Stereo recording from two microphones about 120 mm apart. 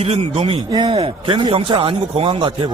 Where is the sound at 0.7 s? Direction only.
40° right (ahead or behind).